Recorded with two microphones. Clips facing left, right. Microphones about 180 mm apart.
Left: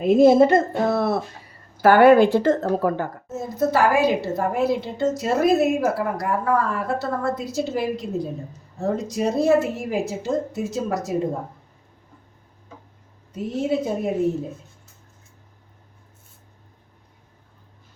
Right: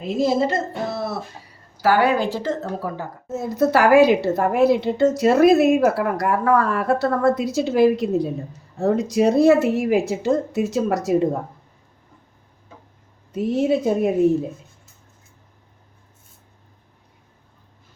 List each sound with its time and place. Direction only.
0.0 s speech: 55° left (ahead or behind)
3.3 s a woman's voice: 70° right (ahead or behind)
13.3 s a woman's voice: 70° right (ahead or behind)